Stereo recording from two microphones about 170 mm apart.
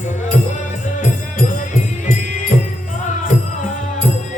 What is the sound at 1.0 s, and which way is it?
Music, 45° left (ahead or behind).